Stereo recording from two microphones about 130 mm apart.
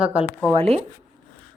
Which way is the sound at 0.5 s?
50° right (ahead or behind).